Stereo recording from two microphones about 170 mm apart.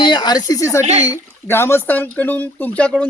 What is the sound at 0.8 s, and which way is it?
Speech, 40° right (ahead or behind).